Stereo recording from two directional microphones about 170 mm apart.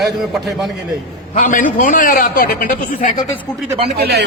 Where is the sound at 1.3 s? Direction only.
50° left (ahead or behind).